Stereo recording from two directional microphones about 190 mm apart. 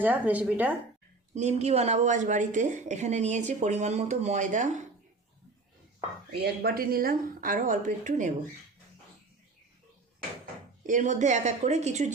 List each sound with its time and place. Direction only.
0.0 s speech: 10° right (ahead or behind)
1.3 s a woman's voice: 35° right (ahead or behind)
6.3 s a woman's voice: 55° right (ahead or behind)
10.8 s a woman's voice: 40° right (ahead or behind)